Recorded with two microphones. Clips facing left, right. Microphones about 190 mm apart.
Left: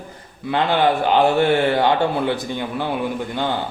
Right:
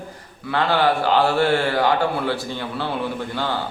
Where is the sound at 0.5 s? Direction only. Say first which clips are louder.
Left 1 dB; 20° left (ahead or behind).